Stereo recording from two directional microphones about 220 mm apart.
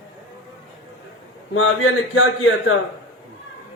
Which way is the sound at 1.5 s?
65° left (ahead or behind).